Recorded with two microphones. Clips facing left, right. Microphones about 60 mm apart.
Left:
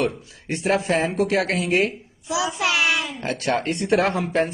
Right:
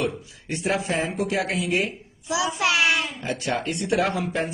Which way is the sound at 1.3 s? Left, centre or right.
Left.